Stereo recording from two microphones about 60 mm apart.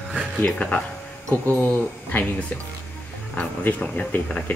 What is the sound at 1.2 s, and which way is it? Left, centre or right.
Speech, right.